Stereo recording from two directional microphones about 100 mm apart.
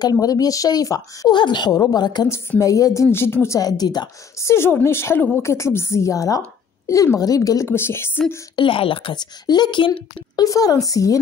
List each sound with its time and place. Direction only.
0.0 s speech: 35° left (ahead or behind)
1.3 s a woman's voice: 50° left (ahead or behind)
2.6 s speech: 30° left (ahead or behind)
3.4 s speech: 35° left (ahead or behind)
4.4 s a woman's voice: 25° left (ahead or behind)
7.6 s a woman's voice: 25° left (ahead or behind)
8.5 s speech: 65° left (ahead or behind)
9.1 s a woman's voice: 45° left (ahead or behind)
10.4 s speech: 35° left (ahead or behind)